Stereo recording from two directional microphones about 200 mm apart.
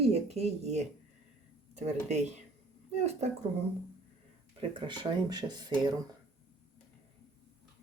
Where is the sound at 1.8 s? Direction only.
35° right (ahead or behind).